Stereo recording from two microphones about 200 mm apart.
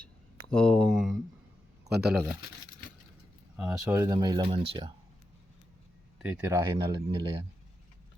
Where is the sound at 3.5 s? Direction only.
5° right (ahead or behind); by 4.9 s 25° right (ahead or behind).